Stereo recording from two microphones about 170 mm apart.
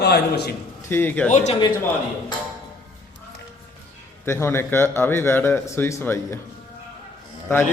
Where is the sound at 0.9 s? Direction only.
10° left (ahead or behind).